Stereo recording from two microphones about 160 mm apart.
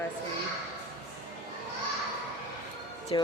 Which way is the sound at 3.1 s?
35° left (ahead or behind).